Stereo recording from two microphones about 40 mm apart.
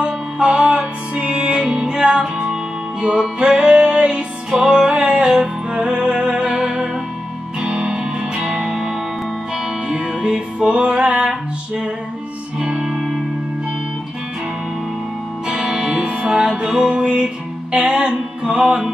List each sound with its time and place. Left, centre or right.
0.0 s music: right
4.5 s music: centre
8.0 s music: centre
15.4 s music: right